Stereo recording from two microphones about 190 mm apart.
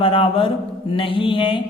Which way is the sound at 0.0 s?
25° left (ahead or behind).